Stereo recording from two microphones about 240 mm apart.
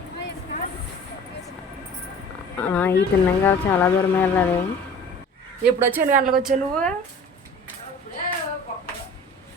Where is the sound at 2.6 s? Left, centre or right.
Centre.